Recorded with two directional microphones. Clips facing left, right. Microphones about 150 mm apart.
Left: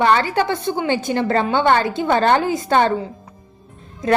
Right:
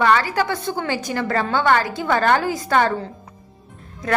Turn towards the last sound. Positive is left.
turn(degrees=20)  # may be behind; listen again after turning